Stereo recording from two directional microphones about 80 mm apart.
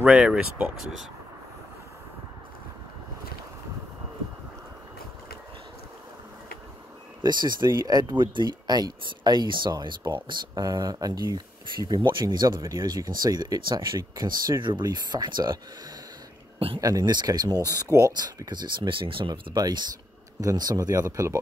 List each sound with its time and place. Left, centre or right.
0.0 s speech: centre
7.2 s speech: right
10.5 s speech: right
14.6 s speech: right
16.5 s speech: right
16.8 s speech: right
17.6 s speech: right
18.1 s speech: right
20.3 s speech: right